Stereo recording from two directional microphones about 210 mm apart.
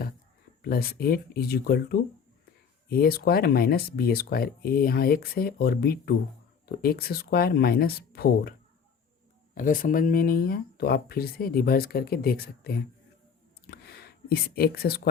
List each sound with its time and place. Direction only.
0.7 s speech: 45° left (ahead or behind)
9.6 s speech: 40° left (ahead or behind)
13.7 s a sound: 50° left (ahead or behind)